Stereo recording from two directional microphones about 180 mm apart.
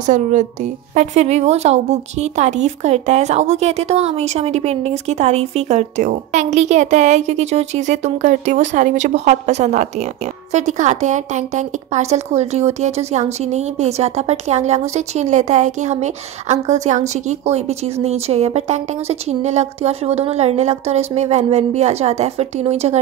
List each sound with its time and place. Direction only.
0.0 s a woman's voice: 45° right (ahead or behind)